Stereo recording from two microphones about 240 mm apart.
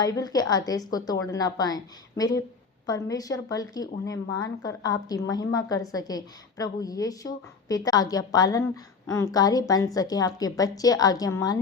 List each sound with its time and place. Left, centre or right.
0.0 s a woman's voice: centre